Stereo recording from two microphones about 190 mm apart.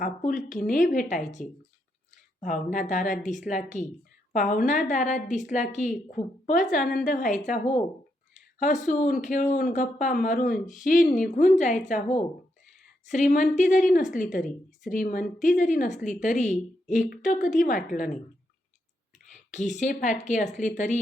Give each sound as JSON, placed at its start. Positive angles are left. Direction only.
{"t": 0.5, "sound": "a woman's voice", "side_deg": 45}
{"t": 8.3, "sound": "a sound", "side_deg": 40}
{"t": 8.9, "sound": "a woman's voice", "side_deg": 45}
{"t": 19.3, "sound": "a woman's voice", "side_deg": 40}